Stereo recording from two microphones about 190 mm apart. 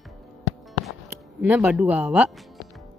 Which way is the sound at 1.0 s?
10° right (ahead or behind).